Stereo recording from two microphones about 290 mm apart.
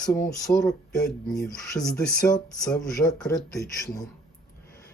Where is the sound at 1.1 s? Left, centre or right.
Centre.